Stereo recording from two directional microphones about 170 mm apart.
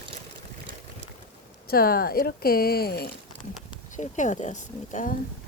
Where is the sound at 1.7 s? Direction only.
60° left (ahead or behind).